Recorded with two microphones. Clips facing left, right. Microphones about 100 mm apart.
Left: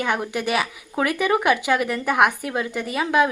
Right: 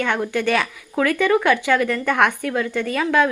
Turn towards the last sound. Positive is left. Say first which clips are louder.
# right 2 dB
turn(degrees=20)  # may be behind; listen again after turning